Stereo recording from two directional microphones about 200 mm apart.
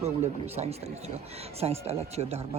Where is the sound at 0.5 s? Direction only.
30° right (ahead or behind).